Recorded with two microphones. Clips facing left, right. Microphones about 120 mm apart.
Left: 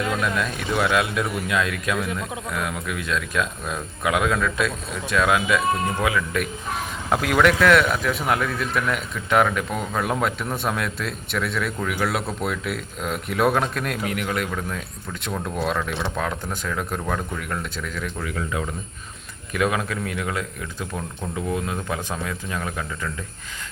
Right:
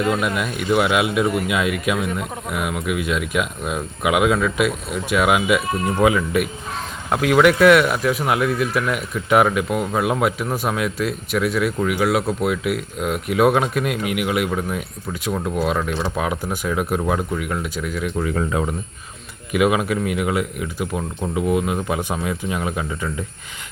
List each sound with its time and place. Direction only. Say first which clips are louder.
0.0 s speech: right 3 dB; 5° right (ahead or behind)
6.0 s speech: right 6 dB; 25° right (ahead or behind)
7.1 s speech: right 4 dB; centre (ahead or behind)
18.3 s speech: right 4 dB; 30° right (ahead or behind)
19.5 s speech: right 5 dB; 15° right (ahead or behind)